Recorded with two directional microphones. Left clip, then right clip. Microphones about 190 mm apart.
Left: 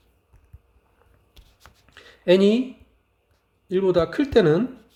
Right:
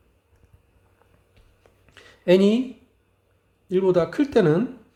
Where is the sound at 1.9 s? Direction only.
15° left (ahead or behind).